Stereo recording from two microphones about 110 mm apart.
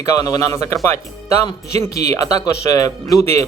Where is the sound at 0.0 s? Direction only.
30° left (ahead or behind).